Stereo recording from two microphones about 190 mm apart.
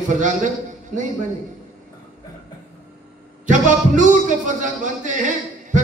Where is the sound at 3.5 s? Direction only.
40° right (ahead or behind).